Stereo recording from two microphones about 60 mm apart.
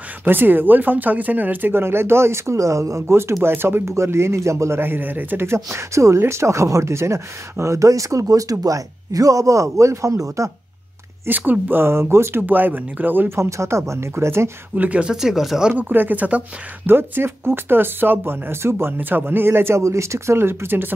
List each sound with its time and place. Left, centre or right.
0.2 s speech: right
4.7 s speech: right
11.2 s speech: right
12.4 s speech: right
13.4 s speech: right
14.8 s speech: right
15.0 s speech: centre
15.9 s speech: right
16.8 s speech: right
18.9 s speech: right
19.8 s speech: right